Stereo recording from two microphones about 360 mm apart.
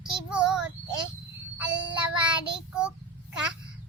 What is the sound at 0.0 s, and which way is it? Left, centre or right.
Child singing, centre.